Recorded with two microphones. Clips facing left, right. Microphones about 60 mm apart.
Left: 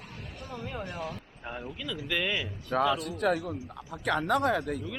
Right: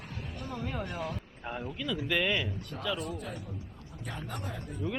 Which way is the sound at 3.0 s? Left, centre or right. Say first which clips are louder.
Left 10 dB; left.